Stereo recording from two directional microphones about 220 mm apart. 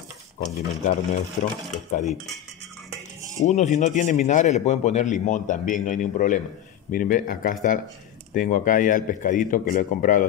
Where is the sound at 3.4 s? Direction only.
30° left (ahead or behind).